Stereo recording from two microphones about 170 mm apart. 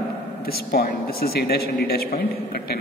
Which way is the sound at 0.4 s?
65° left (ahead or behind).